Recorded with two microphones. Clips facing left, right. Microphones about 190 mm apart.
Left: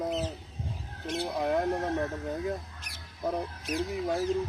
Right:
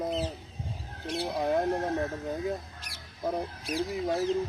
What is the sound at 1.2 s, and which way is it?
Speech, centre (ahead or behind).